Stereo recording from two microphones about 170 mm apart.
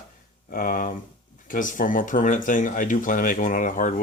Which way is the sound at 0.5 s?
55° left (ahead or behind).